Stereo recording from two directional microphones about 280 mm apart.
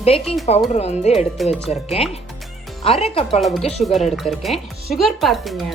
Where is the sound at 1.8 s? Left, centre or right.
Left.